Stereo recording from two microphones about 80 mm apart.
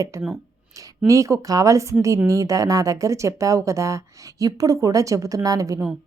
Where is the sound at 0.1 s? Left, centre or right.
Right.